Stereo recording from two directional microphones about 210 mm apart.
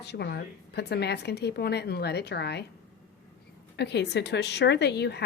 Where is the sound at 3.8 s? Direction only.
55° left (ahead or behind).